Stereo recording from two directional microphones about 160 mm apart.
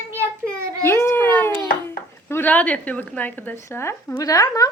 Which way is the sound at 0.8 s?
15° left (ahead or behind).